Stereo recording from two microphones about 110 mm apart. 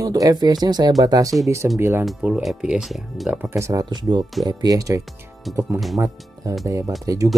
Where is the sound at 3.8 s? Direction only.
40° right (ahead or behind).